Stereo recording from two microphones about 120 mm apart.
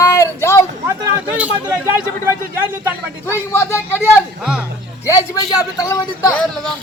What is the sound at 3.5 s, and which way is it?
Speech, 20° left (ahead or behind).